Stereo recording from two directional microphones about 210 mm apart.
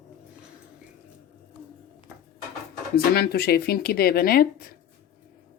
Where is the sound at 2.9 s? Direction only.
50° left (ahead or behind).